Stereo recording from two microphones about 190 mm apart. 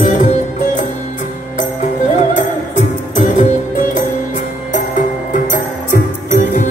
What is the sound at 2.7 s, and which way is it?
Music, 40° left (ahead or behind).